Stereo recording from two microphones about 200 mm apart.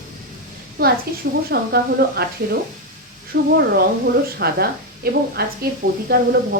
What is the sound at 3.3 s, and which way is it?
A woman's voice, 55° right (ahead or behind).